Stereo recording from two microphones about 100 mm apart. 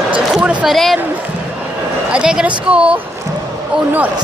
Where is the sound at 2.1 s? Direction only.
10° right (ahead or behind).